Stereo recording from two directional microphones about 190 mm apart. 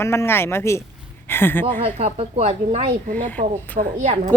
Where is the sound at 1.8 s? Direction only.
30° right (ahead or behind).